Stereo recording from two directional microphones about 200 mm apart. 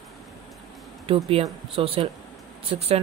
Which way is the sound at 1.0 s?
30° right (ahead or behind).